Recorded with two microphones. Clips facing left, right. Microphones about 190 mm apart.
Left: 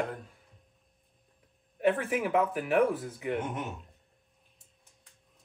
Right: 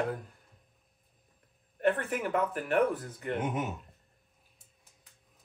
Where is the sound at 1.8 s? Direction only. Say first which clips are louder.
Left 2 dB; centre (ahead or behind).